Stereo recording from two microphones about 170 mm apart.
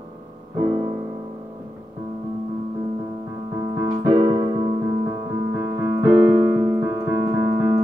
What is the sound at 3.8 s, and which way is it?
Keyboard, 25° right (ahead or behind).